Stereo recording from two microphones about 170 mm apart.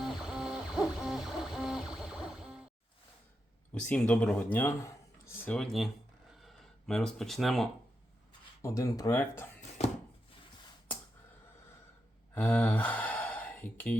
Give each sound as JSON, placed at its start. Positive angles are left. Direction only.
{"t": 0.0, "sound": "music", "side_deg": 0}
{"t": 3.7, "sound": "speech", "side_deg": 5}
{"t": 8.6, "sound": "speech", "side_deg": 20}
{"t": 12.3, "sound": "speech", "side_deg": 10}